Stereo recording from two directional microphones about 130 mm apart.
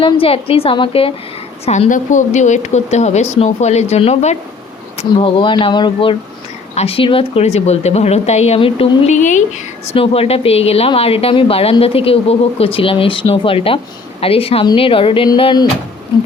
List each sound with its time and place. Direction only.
0.0 s speech: 45° left (ahead or behind)
1.9 s speech: 70° left (ahead or behind)
4.9 s speech: 40° left (ahead or behind)
9.1 s speech: 70° left (ahead or behind)
9.9 s speech: 45° left (ahead or behind)